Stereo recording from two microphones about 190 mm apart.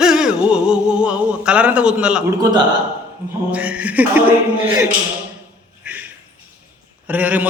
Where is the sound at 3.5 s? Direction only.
5° right (ahead or behind).